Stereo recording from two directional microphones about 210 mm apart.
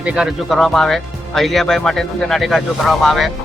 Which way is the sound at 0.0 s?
5° right (ahead or behind).